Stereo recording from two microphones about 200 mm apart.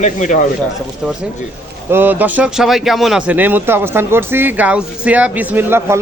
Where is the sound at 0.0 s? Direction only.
40° left (ahead or behind).